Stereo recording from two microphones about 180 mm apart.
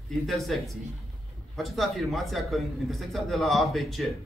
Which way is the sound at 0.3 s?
Centre (ahead or behind).